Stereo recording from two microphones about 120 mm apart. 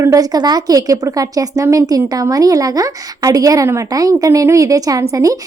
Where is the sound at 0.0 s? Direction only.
30° right (ahead or behind).